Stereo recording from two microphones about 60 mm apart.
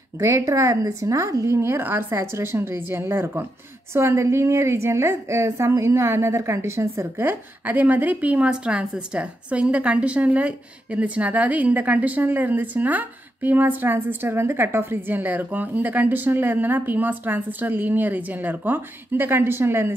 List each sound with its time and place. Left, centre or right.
0.2 s a woman's voice: right
1.6 s a woman's voice: right
7.2 s a woman's voice: right